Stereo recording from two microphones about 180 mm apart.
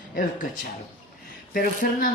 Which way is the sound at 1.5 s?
50° left (ahead or behind).